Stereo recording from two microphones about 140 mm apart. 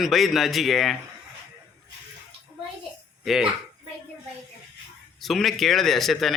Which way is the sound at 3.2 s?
Centre (ahead or behind).